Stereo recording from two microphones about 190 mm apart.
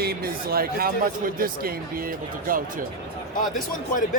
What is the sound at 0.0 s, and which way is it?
Speech, 55° right (ahead or behind).